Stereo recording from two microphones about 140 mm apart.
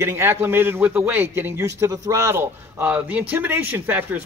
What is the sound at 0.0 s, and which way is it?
Speech, 15° right (ahead or behind).